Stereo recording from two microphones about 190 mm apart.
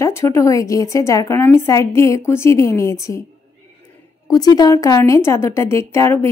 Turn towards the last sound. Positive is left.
turn(degrees=15)  # may be behind; listen again after turning